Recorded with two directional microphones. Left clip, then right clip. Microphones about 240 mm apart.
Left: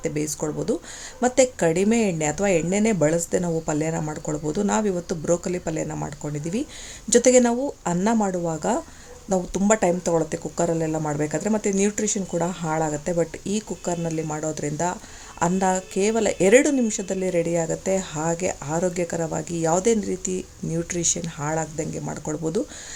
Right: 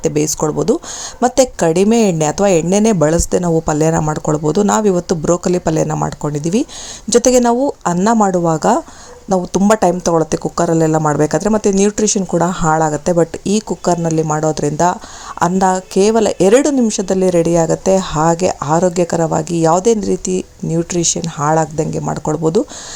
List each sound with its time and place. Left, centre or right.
0.0 s a woman's voice: right